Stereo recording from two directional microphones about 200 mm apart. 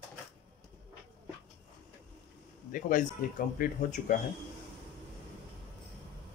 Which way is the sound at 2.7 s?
40° left (ahead or behind).